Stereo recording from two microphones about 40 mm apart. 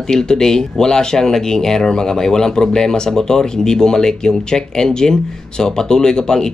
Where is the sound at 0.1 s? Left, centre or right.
Centre.